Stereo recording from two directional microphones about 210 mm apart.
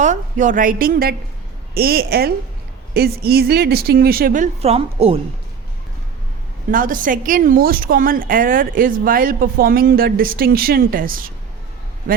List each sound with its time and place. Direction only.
0.0 s a woman's voice: 35° right (ahead or behind)
6.7 s a woman's voice: 40° right (ahead or behind)